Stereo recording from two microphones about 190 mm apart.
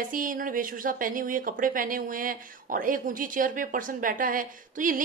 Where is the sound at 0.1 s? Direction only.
45° right (ahead or behind).